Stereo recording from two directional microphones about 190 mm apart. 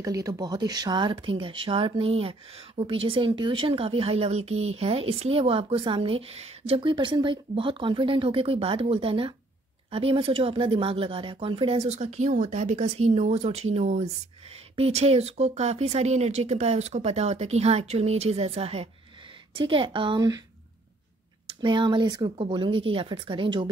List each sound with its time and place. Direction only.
0.0 s speech: 20° right (ahead or behind)
21.5 s speech: 25° right (ahead or behind)